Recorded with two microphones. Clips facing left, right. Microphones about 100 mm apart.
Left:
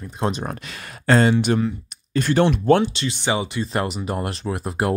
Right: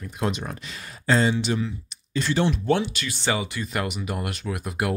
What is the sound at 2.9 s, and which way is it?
Speech, 25° left (ahead or behind).